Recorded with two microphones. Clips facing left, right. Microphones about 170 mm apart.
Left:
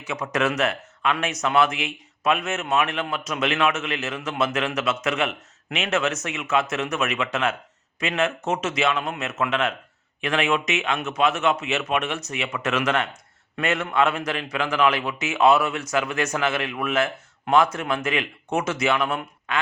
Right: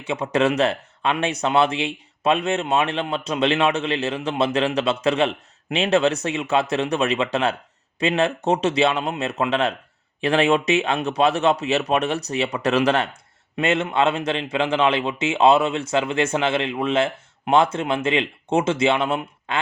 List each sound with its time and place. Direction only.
0.0 s a man's voice: 30° right (ahead or behind)